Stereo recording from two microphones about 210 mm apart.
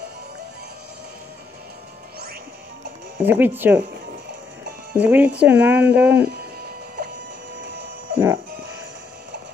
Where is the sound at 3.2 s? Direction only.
10° right (ahead or behind).